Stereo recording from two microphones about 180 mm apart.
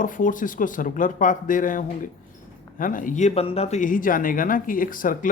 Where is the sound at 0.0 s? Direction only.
45° left (ahead or behind).